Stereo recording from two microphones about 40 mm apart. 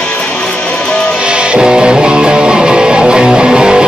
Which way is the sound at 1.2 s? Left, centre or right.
Right.